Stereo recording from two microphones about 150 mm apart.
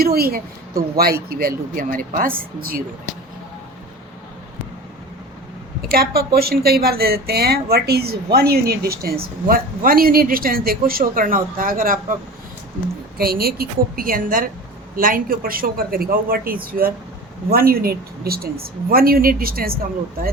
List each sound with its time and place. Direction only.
0.0 s a woman's voice: 90° right
5.8 s a woman's voice: 85° right; by 12.1 s 70° right (ahead or behind)
13.1 s a man's voice: 90° right
17.5 s a woman's voice: 90° right